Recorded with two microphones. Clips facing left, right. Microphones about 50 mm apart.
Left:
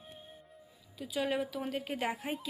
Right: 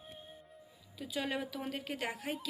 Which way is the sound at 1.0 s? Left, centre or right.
Centre.